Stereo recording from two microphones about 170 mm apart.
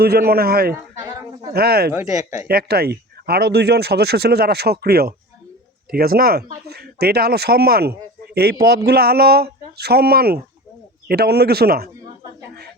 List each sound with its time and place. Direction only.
0.0 s speech: 65° right (ahead or behind)
1.9 s speech: 15° right (ahead or behind)
2.5 s speech: 65° right (ahead or behind)